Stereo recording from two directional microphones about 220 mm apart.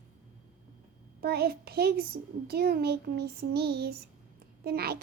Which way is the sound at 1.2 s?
45° right (ahead or behind).